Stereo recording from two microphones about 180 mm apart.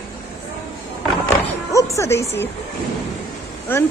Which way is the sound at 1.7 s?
15° left (ahead or behind).